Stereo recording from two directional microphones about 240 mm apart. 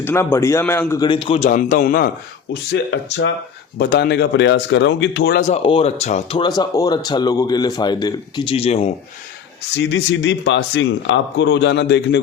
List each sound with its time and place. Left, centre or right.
0.0 s speech: centre; by 2.0 s left
2.5 s speech: left
5.4 s speech: left
9.7 s speech: left